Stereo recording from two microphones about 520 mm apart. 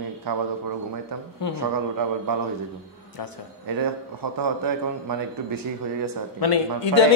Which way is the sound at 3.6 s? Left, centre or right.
Right.